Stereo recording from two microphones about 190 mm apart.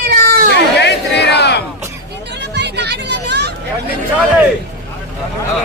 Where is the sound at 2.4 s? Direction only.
65° right (ahead or behind).